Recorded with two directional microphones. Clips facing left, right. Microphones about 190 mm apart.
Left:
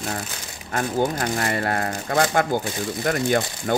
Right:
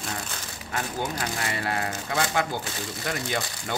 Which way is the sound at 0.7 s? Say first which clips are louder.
Left 8 dB; 45° left (ahead or behind).